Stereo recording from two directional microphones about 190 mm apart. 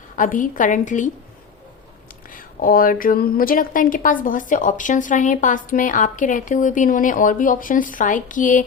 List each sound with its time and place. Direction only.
0.2 s a woman's voice: 45° left (ahead or behind)
2.3 s a woman's voice: 50° left (ahead or behind)